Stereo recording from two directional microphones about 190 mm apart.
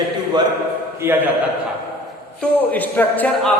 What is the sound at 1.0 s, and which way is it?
Speech, 10° right (ahead or behind).